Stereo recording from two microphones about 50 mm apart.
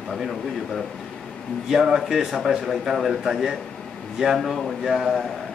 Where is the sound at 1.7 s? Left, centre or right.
Centre.